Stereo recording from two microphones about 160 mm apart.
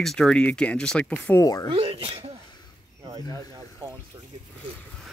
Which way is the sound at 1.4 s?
20° left (ahead or behind).